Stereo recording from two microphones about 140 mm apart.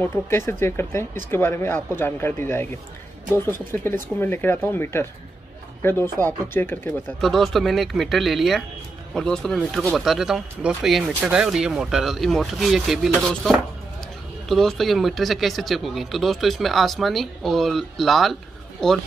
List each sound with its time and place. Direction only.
0.0 s speech: 15° left (ahead or behind)
7.2 s speech: centre (ahead or behind)